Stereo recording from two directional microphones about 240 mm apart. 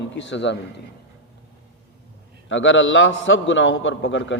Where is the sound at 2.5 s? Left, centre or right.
Left.